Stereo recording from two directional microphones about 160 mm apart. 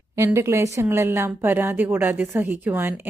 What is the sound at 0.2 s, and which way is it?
A woman's voice, 15° right (ahead or behind).